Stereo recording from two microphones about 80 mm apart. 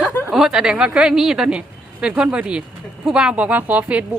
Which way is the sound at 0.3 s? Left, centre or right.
Centre.